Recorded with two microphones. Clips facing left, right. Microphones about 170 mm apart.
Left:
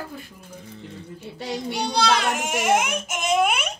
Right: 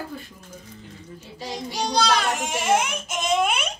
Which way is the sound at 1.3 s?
60° left (ahead or behind).